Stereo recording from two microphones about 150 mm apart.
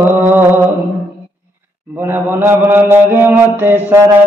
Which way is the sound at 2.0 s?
15° right (ahead or behind).